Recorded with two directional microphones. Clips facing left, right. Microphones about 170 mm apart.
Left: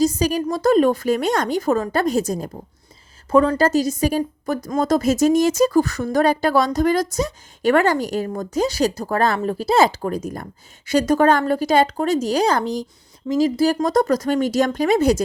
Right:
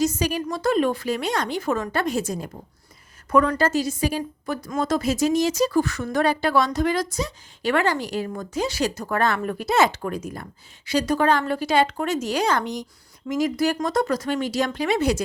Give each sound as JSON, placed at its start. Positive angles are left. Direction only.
{"t": 0.2, "sound": "a woman's voice", "side_deg": 40}
{"t": 3.2, "sound": "a woman's voice", "side_deg": 30}